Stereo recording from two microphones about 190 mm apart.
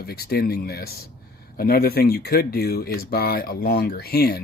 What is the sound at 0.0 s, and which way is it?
Speech, 55° left (ahead or behind).